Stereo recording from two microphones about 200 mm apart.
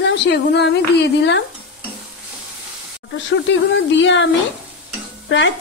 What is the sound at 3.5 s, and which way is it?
Speech, 65° left (ahead or behind).